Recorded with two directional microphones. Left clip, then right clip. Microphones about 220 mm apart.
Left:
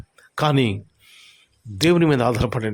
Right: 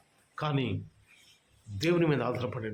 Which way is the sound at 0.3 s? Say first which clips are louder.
Left 13 dB; 50° left (ahead or behind).